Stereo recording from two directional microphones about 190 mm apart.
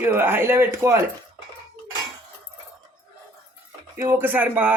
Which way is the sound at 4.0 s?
15° right (ahead or behind).